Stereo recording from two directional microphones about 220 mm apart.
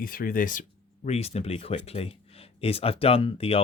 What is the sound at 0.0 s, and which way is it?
Speech, 40° left (ahead or behind).